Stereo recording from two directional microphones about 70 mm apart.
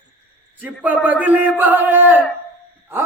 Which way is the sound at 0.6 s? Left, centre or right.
Right.